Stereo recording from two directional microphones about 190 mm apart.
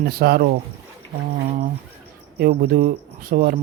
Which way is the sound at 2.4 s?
55° right (ahead or behind).